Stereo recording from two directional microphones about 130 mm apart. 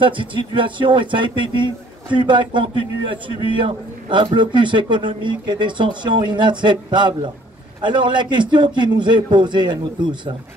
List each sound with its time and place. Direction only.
0.0 s a man's voice: 40° right (ahead or behind)